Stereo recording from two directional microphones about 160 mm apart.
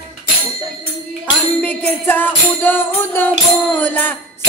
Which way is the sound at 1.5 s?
10° left (ahead or behind).